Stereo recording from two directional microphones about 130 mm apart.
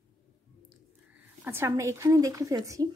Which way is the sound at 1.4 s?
20° right (ahead or behind).